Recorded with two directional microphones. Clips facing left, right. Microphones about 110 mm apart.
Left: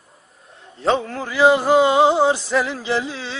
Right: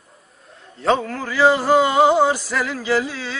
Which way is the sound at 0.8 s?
25° left (ahead or behind).